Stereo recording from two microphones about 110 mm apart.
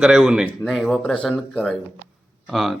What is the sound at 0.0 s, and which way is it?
Speech, 5° right (ahead or behind).